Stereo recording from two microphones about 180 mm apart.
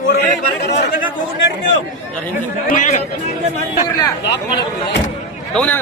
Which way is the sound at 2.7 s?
45° left (ahead or behind).